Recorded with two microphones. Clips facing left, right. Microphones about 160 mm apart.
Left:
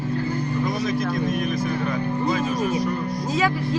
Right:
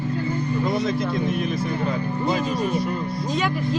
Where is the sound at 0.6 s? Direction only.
25° right (ahead or behind).